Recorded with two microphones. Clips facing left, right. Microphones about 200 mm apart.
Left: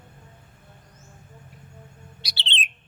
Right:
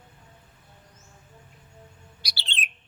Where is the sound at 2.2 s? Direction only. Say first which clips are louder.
Left 3 dB; 20° left (ahead or behind).